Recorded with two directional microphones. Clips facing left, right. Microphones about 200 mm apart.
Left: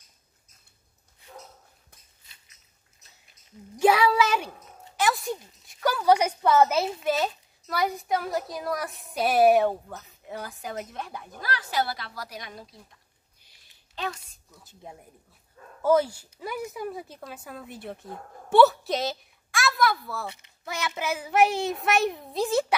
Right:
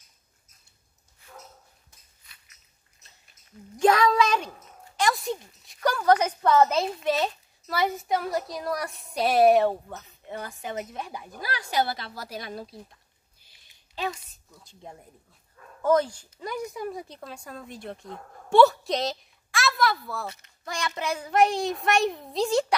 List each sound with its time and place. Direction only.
2.2 s biting: 25° left (ahead or behind)
3.8 s a woman's voice: 10° left (ahead or behind)
11.4 s a woman's voice: 15° right (ahead or behind)
13.9 s a woman's voice: 5° right (ahead or behind)